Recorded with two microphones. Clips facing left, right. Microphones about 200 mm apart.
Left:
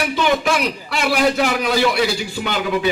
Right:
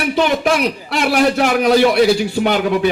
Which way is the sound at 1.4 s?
50° right (ahead or behind).